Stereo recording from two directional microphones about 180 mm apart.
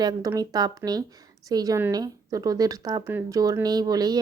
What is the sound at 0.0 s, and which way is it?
A woman's voice, 20° right (ahead or behind).